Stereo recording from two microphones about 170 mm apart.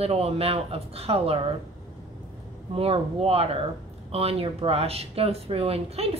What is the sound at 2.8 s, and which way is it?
Speech, 35° right (ahead or behind).